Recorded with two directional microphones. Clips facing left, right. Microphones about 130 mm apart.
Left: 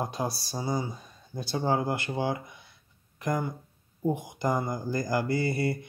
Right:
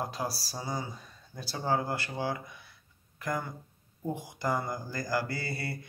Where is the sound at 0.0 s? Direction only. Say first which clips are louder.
Left 3 dB; 20° left (ahead or behind).